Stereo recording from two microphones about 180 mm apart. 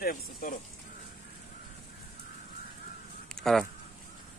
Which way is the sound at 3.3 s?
Centre (ahead or behind).